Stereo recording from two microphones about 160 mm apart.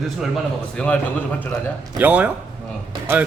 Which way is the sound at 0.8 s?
5° left (ahead or behind).